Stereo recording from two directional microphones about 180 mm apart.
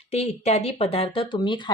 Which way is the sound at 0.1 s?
35° left (ahead or behind).